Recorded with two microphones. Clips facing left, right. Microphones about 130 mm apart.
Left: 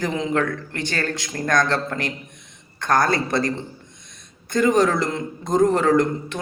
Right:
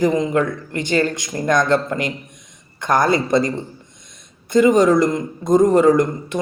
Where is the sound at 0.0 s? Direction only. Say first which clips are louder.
Right 5 dB; 10° right (ahead or behind).